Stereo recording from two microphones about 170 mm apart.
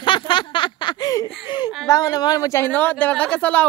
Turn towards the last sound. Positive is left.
turn(degrees=10)  # may be behind; listen again after turning